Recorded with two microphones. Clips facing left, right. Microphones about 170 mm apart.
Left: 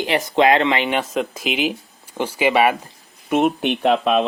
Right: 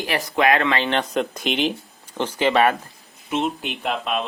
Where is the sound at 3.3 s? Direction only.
55° left (ahead or behind).